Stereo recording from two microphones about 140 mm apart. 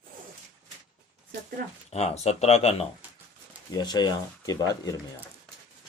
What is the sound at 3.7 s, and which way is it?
Speech, 30° left (ahead or behind).